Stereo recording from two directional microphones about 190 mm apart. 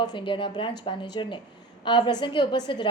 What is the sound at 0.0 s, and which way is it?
A woman's voice, 25° left (ahead or behind).